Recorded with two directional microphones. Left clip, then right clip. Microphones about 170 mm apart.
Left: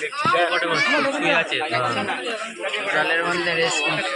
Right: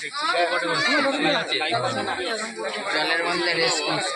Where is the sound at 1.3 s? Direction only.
25° left (ahead or behind).